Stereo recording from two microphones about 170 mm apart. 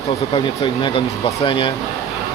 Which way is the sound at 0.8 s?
30° left (ahead or behind).